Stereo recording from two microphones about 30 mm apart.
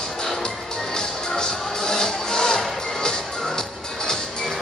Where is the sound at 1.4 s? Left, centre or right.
Left.